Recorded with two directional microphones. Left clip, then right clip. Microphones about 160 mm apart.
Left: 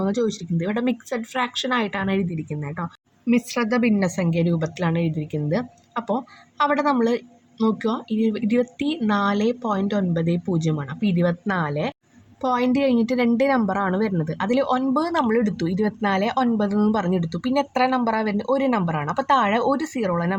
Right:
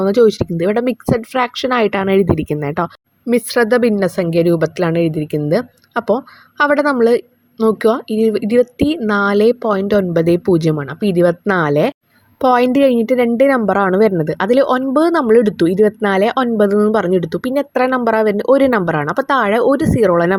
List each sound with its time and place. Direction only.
0.0 s speech: 40° right (ahead or behind)